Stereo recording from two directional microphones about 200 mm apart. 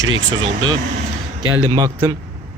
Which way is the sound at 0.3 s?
20° right (ahead or behind).